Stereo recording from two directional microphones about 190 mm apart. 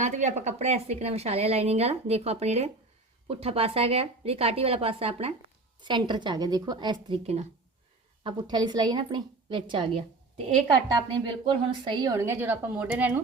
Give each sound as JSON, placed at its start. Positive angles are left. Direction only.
{"t": 0.0, "sound": "a woman's voice", "side_deg": -40}